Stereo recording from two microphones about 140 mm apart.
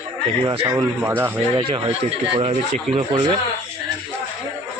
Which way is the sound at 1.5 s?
35° right (ahead or behind).